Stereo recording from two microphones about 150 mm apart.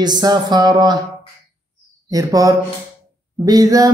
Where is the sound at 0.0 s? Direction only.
30° right (ahead or behind).